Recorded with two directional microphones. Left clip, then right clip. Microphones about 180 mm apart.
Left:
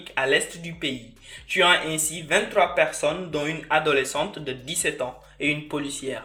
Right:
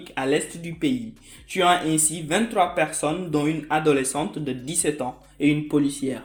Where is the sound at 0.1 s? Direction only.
45° right (ahead or behind).